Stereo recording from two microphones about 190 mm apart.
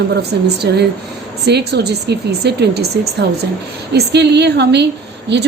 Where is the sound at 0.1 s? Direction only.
60° right (ahead or behind).